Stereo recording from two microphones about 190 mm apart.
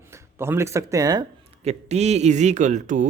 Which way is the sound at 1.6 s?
35° right (ahead or behind).